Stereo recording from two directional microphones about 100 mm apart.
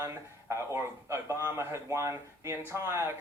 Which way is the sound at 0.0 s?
25° right (ahead or behind).